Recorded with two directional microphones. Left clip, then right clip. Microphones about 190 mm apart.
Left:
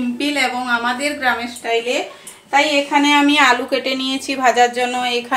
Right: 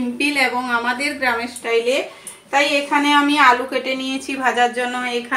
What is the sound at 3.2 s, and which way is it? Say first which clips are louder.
A woman's voice: even; 35° left (ahead or behind).